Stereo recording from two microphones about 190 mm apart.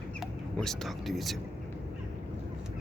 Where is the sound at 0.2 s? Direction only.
Centre (ahead or behind).